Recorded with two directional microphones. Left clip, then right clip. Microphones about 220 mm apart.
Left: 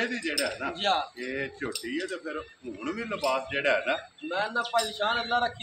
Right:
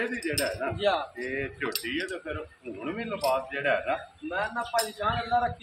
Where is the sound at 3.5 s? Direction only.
50° left (ahead or behind).